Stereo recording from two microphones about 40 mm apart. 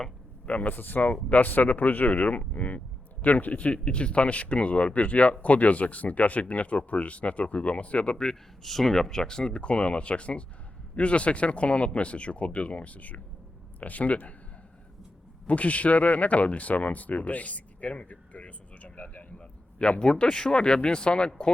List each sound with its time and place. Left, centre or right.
0.4 s speech: left
8.6 s speech: centre; by 14.3 s left
15.4 s speech: left
19.4 s speech: left